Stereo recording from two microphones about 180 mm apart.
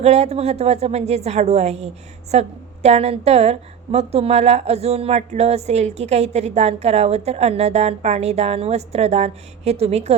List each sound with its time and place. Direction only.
0.0 s a woman's voice: 35° right (ahead or behind)